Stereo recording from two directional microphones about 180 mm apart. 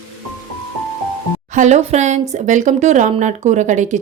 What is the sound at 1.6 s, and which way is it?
A woman's voice, 40° right (ahead or behind).